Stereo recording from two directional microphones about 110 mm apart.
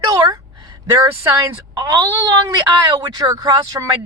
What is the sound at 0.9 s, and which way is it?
Speech, 25° right (ahead or behind).